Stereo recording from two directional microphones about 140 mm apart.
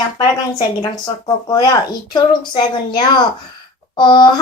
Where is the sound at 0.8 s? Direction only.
30° left (ahead or behind).